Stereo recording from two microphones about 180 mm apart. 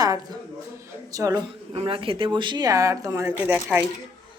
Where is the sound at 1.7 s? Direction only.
30° right (ahead or behind).